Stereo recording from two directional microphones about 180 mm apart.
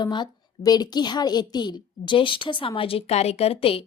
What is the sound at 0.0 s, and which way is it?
A woman's voice, 25° left (ahead or behind).